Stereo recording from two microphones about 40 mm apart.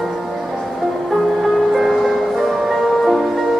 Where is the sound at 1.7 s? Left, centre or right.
Centre.